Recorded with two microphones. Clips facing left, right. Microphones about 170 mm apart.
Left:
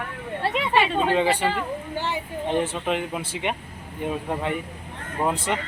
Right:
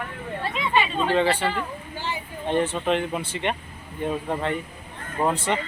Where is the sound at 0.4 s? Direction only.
70° left (ahead or behind).